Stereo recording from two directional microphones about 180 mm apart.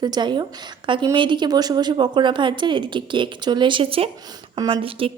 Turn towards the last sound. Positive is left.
turn(degrees=-30)  # may be behind; listen again after turning